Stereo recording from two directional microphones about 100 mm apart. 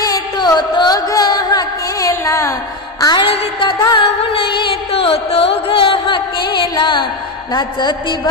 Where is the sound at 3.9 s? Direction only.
65° left (ahead or behind).